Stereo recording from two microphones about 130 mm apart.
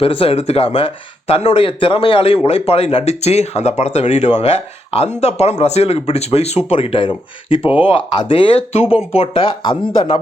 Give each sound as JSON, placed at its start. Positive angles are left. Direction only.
{"t": 0.0, "sound": "speech", "side_deg": 45}